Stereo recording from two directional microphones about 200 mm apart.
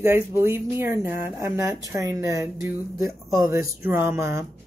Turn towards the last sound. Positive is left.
turn(degrees=-15)  # may be behind; listen again after turning